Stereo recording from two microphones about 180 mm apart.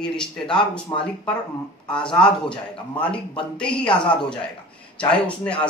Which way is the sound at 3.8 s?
25° left (ahead or behind).